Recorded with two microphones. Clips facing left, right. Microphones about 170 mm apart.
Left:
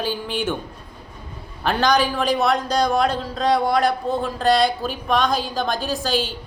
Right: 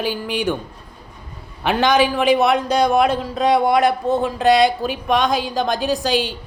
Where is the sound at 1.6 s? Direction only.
5° right (ahead or behind).